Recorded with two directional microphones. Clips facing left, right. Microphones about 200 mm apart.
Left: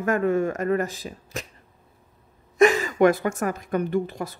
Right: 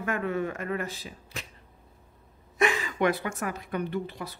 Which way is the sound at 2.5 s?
45° left (ahead or behind).